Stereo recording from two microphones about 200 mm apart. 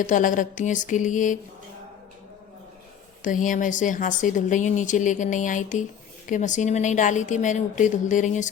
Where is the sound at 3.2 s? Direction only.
40° left (ahead or behind).